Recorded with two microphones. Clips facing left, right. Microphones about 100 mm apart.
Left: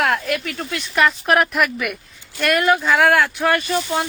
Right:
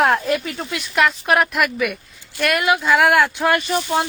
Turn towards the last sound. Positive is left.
turn(degrees=-20)  # may be behind; listen again after turning